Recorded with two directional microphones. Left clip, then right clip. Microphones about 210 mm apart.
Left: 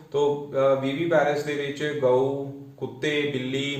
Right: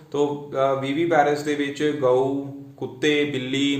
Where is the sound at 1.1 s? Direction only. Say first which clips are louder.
Right 2 dB; 55° right (ahead or behind).